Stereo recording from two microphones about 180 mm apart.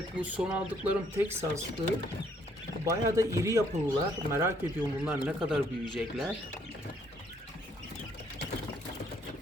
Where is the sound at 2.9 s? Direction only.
15° right (ahead or behind).